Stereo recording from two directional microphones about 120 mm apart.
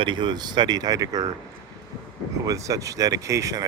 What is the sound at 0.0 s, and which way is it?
Speech, 40° right (ahead or behind).